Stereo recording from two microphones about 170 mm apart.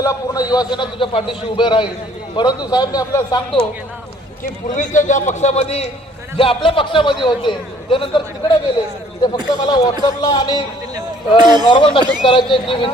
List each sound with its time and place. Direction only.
0.0 s a man's voice: 20° left (ahead or behind)
4.8 s a man's voice: 45° left (ahead or behind); by 8.5 s 30° left (ahead or behind)
9.6 s a man's voice: 25° left (ahead or behind)
10.9 s speech: 25° right (ahead or behind)
11.6 s a man's voice: 25° left (ahead or behind)